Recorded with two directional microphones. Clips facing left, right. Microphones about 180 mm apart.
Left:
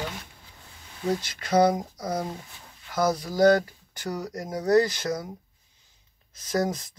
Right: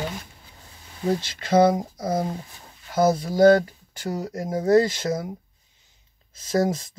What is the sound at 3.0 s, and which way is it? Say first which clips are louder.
Speech: right 4 dB; 25° right (ahead or behind).